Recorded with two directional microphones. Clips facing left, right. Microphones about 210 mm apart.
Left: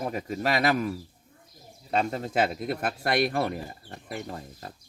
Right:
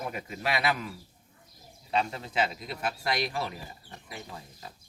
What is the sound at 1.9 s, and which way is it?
A man's voice, 45° left (ahead or behind).